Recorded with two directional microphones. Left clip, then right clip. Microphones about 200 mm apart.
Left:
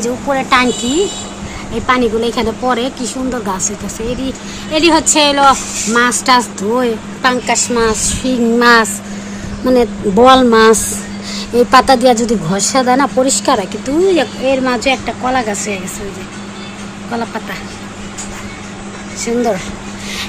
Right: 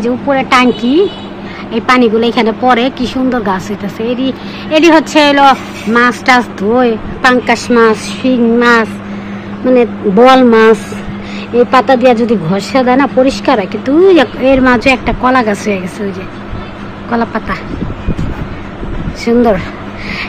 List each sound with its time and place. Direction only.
0.0 s speech: 10° right (ahead or behind)
1.9 s speech: 5° right (ahead or behind)
8.2 s speech: 20° left (ahead or behind)
14.0 s speech: centre (ahead or behind)
17.1 s speech: 5° left (ahead or behind)
19.2 s speech: centre (ahead or behind)